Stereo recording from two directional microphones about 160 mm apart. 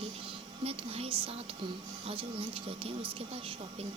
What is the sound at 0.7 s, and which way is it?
Speech, 35° right (ahead or behind).